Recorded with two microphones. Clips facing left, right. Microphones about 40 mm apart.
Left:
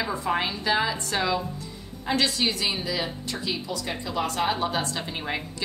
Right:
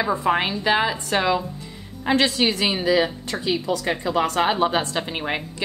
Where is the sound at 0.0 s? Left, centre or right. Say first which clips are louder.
Right 5 dB; right.